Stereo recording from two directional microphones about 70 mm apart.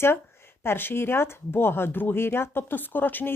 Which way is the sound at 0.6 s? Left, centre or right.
Left.